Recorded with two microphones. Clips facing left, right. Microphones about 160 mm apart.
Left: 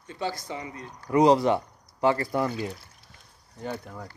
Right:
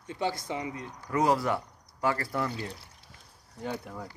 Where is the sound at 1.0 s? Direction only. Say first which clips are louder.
Left 7 dB; 20° left (ahead or behind).